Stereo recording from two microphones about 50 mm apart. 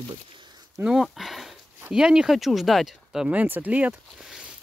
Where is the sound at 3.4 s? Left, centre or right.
Right.